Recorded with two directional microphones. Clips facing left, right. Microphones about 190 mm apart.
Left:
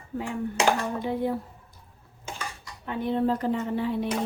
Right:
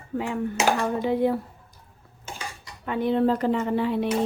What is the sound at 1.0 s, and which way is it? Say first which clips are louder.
Speech: right 5 dB; 90° right.